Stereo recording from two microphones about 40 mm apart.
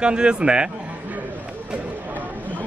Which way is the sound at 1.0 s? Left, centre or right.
Right.